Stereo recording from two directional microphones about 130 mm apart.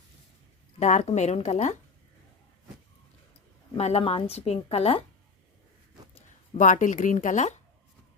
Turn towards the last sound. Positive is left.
turn(degrees=70)  # may be behind; listen again after turning